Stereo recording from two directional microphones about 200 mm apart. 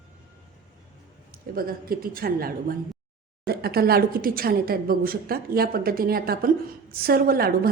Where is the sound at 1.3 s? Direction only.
50° right (ahead or behind).